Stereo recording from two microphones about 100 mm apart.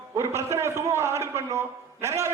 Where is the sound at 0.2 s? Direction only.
25° right (ahead or behind).